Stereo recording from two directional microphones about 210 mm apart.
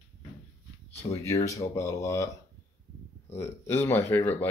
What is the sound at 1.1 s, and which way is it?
Speech, 15° left (ahead or behind).